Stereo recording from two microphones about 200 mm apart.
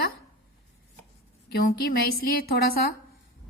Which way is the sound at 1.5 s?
50° left (ahead or behind).